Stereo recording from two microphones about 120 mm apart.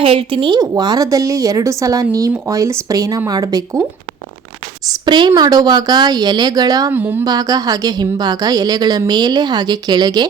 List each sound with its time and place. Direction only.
0.0 s a woman's voice: 45° right (ahead or behind)
0.6 s speech: 30° right (ahead or behind)
4.9 s a woman's voice: 40° right (ahead or behind)
6.9 s speech: 15° right (ahead or behind)
7.3 s a woman's voice: 35° right (ahead or behind)